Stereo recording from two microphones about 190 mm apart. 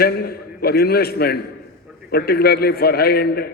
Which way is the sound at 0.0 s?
55° left (ahead or behind).